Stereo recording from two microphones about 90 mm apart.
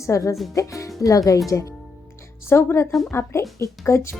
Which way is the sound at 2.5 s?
30° left (ahead or behind).